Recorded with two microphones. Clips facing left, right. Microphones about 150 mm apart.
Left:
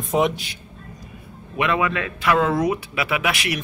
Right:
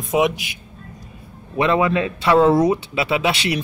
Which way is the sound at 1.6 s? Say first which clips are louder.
Right 4 dB; 30° right (ahead or behind).